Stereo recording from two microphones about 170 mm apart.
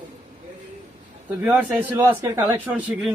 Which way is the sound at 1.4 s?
10° right (ahead or behind).